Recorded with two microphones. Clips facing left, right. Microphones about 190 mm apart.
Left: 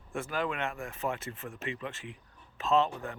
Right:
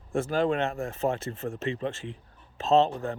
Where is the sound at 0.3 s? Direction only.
30° right (ahead or behind).